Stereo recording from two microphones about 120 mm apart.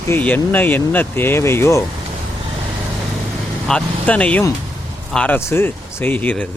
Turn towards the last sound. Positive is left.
turn(degrees=15)  # may be behind; listen again after turning